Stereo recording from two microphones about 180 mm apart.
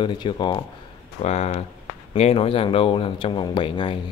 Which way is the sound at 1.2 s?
35° left (ahead or behind).